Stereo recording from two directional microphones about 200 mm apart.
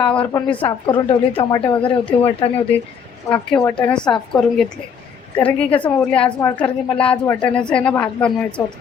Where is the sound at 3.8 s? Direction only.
5° left (ahead or behind).